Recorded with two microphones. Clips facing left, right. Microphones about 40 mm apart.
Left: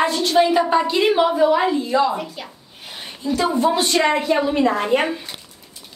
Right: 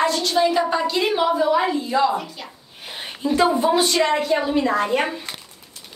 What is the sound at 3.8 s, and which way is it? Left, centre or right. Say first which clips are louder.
A woman's voice: left 1 dB; centre.